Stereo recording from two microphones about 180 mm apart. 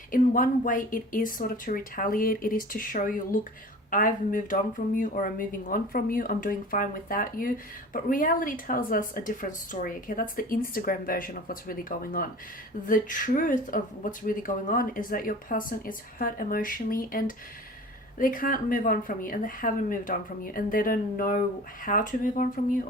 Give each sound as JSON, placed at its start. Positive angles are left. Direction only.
{"t": 0.1, "sound": "speech", "side_deg": 50}